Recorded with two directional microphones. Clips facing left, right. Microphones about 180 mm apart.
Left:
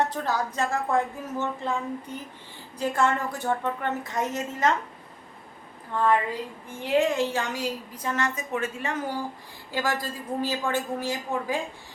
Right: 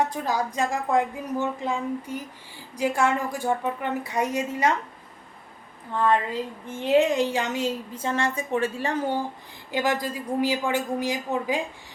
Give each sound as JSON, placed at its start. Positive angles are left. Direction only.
{"t": 0.0, "sound": "speech", "side_deg": -10}
{"t": 6.7, "sound": "a woman's voice", "side_deg": -20}
{"t": 9.7, "sound": "speech", "side_deg": -20}